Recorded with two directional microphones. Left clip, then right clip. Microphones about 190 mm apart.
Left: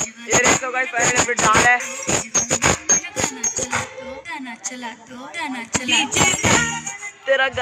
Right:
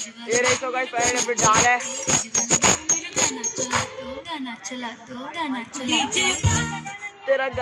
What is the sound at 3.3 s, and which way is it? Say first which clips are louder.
Music: left 2 dB; 25° left (ahead or behind).